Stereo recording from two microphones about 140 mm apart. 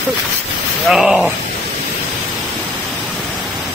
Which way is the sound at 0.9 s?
5° right (ahead or behind).